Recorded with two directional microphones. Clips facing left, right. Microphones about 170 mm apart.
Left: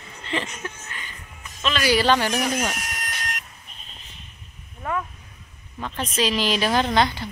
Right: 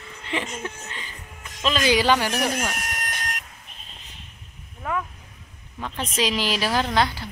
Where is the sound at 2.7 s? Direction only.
55° right (ahead or behind).